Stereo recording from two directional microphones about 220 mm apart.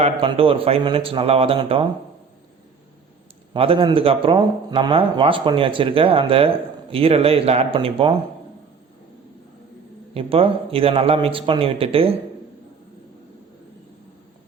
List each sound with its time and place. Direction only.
0.0 s speech: 25° right (ahead or behind)
3.5 s speech: 25° right (ahead or behind)
10.2 s speech: 25° right (ahead or behind)